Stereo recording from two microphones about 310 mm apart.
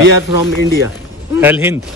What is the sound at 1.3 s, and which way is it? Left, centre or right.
Speech, centre.